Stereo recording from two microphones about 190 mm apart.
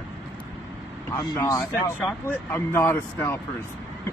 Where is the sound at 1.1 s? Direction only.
20° left (ahead or behind).